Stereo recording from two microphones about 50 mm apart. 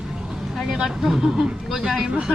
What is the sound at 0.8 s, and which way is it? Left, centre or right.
Speech, centre.